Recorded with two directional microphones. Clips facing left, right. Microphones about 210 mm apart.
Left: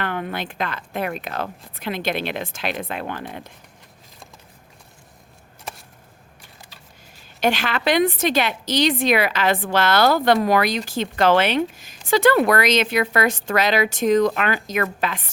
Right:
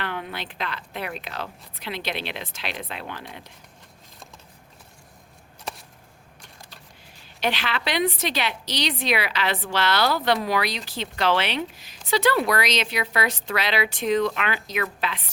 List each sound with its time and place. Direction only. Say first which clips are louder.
0.0 s a woman's voice: left 5 dB; 50° left (ahead or behind)
6.4 s a sound: right 1 dB; 5° left (ahead or behind)
7.3 s a woman's voice: left 5 dB; 45° left (ahead or behind)